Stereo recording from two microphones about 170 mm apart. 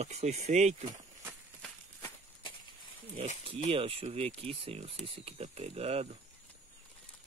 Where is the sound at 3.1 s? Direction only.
30° right (ahead or behind).